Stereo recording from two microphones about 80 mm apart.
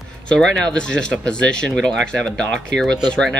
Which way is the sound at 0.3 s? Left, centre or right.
Centre.